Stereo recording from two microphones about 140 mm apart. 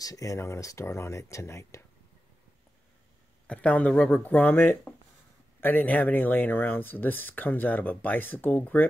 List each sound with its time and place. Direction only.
0.0 s speech: 25° left (ahead or behind)
3.4 s speech: 10° left (ahead or behind)